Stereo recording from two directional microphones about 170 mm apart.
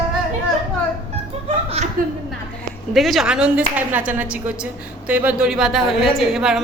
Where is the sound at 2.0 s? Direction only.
55° right (ahead or behind).